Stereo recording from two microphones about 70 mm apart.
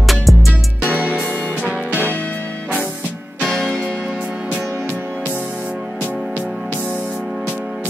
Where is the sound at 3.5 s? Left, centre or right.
Centre.